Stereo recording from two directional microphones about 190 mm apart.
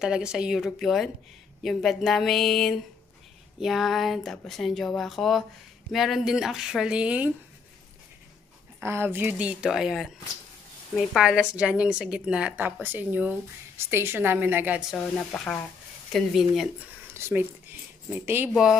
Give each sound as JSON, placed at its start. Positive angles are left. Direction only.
{"t": 0.0, "sound": "a woman's voice", "side_deg": -5}
{"t": 8.7, "sound": "a woman's voice", "side_deg": -10}
{"t": 17.1, "sound": "a woman's voice", "side_deg": -10}